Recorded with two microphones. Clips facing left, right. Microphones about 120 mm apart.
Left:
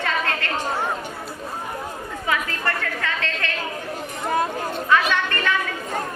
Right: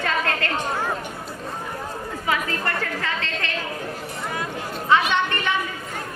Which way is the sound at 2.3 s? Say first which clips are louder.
Even; 30° right (ahead or behind).